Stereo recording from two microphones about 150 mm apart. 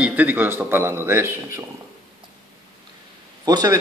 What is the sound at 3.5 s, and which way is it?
Speech, 25° right (ahead or behind).